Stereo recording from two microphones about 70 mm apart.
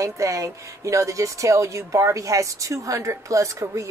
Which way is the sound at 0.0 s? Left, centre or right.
Right.